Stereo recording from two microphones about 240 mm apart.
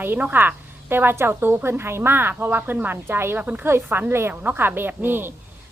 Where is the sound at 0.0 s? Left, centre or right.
Centre.